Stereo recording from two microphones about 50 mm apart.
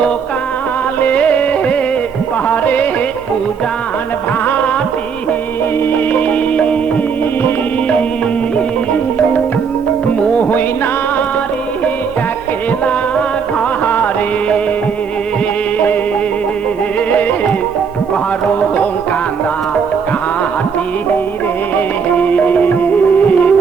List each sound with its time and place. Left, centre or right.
1.0 s music: left
4.4 s music: left
6.1 s music: left
13.8 s music: left
17.1 s music: left
21.8 s music: left